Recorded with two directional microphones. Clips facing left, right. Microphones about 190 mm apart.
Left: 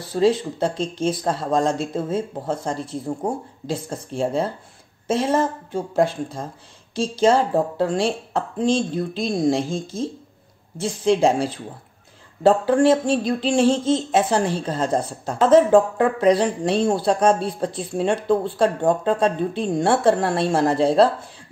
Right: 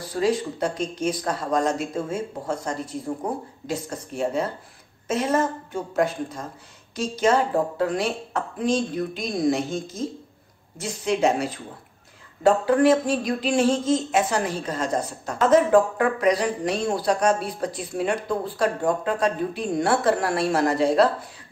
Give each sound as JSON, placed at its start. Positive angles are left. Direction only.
{"t": 0.1, "sound": "speech", "side_deg": 25}